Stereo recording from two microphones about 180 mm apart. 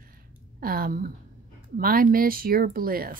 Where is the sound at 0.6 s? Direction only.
55° right (ahead or behind).